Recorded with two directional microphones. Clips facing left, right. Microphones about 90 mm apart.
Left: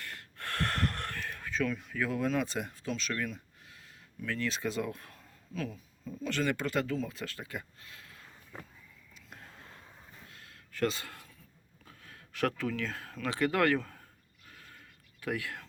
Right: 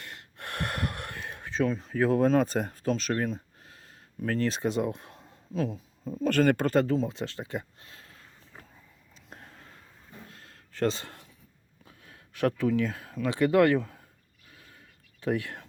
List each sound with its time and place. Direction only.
0.0 s gasp: 20° right (ahead or behind); by 3.8 s 35° right (ahead or behind)
4.2 s speech: 40° right (ahead or behind)
10.2 s a sound: 35° right (ahead or behind)
11.9 s speech: 25° right (ahead or behind)
15.2 s speech: 30° right (ahead or behind)